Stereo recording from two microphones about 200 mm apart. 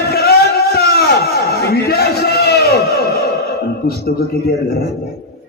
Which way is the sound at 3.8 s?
50° left (ahead or behind).